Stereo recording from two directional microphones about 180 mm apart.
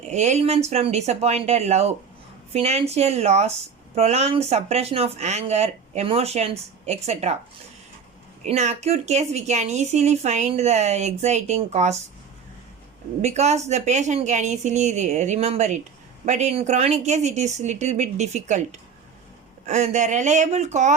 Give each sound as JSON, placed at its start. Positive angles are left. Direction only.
{"t": 0.1, "sound": "speech", "side_deg": -40}
{"t": 8.4, "sound": "speech", "side_deg": -35}
{"t": 13.2, "sound": "speech", "side_deg": -40}